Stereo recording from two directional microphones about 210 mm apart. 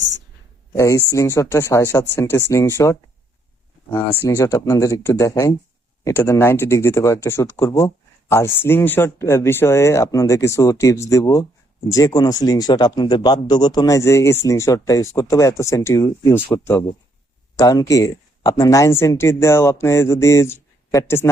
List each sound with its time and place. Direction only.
0.7 s speech: 15° left (ahead or behind)